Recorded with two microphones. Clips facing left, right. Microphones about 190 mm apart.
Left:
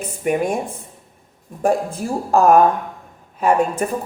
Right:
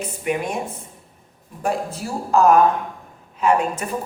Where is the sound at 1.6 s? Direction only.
50° left (ahead or behind).